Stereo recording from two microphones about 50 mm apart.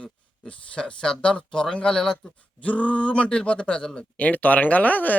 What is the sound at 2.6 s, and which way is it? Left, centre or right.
Speech, left.